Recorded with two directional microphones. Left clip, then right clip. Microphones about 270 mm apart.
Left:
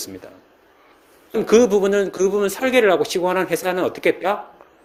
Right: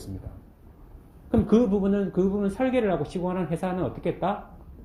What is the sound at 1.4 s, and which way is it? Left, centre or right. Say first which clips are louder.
A man's voice: left 11 dB; left.